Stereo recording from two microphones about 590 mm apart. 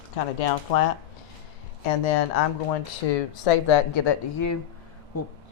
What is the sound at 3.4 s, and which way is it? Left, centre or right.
Speech, left.